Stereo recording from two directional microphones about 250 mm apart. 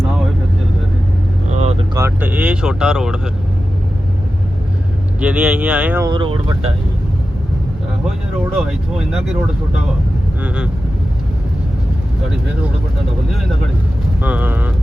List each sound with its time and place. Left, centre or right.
1.5 s vehicle: right
2.0 s speech: centre
5.2 s speech: centre
14.2 s speech: centre